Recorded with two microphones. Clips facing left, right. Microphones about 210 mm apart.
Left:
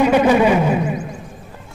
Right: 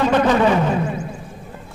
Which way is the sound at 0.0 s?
10° left (ahead or behind).